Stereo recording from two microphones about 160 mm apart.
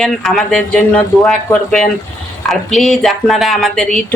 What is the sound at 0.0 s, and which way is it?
Speech, 5° left (ahead or behind).